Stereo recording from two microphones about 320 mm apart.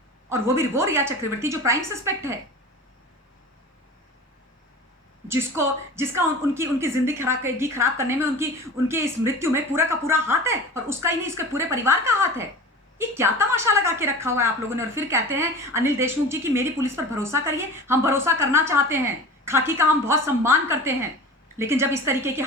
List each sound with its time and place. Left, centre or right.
0.3 s a woman's voice: centre
5.3 s a woman's voice: centre